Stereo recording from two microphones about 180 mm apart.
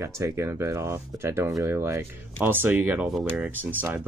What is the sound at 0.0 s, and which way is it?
Speech, 15° right (ahead or behind).